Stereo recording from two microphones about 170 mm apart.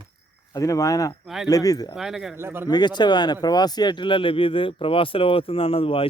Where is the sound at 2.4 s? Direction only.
15° right (ahead or behind).